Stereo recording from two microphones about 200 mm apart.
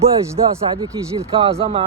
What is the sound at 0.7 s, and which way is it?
Speech, 20° right (ahead or behind).